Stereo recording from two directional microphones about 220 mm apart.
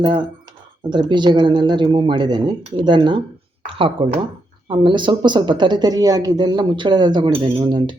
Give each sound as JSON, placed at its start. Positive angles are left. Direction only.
{"t": 0.0, "sound": "speech", "side_deg": -20}